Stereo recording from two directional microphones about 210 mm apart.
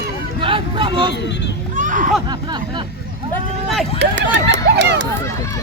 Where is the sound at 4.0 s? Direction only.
55° right (ahead or behind).